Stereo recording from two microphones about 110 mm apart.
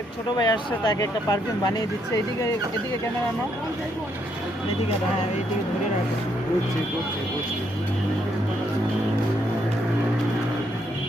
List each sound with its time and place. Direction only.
0.3 s speech: 40° left (ahead or behind)